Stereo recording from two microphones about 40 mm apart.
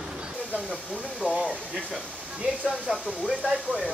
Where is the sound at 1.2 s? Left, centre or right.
Right.